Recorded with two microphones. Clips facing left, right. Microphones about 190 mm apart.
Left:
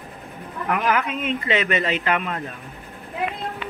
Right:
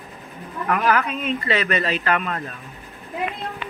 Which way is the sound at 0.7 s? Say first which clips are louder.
Right 2 dB; 15° left (ahead or behind).